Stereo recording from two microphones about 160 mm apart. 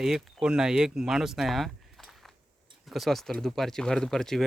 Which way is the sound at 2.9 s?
Centre (ahead or behind).